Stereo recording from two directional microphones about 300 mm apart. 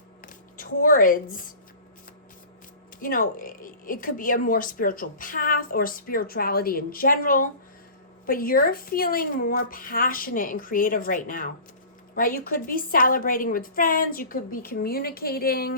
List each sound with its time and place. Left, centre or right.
0.5 s speech: left
3.0 s speech: left